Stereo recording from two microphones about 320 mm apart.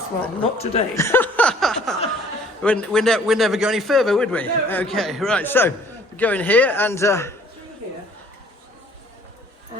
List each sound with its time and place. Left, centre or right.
0.6 s speech: centre
0.9 s a sound: centre
2.6 s a man's voice: centre